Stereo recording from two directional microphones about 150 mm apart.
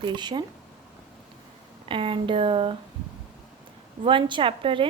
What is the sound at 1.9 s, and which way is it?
Speech, 35° right (ahead or behind).